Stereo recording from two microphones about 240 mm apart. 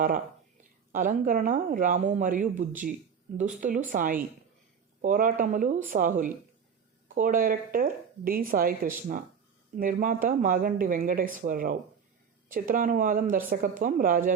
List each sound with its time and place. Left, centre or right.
0.9 s speech: right